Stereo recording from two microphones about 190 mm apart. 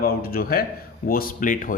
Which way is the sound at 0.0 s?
50° left (ahead or behind).